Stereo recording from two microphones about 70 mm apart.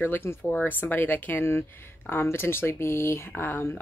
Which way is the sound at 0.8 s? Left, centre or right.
Left.